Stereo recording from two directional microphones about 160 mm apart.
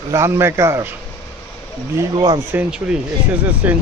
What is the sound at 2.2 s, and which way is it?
Speech, 25° right (ahead or behind).